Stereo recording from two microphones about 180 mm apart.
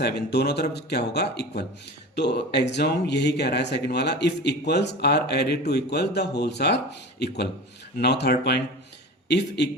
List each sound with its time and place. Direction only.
0.0 s a man's voice: 65° left (ahead or behind)